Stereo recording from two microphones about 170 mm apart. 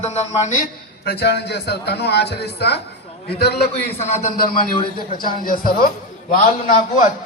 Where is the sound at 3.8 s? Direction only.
40° left (ahead or behind).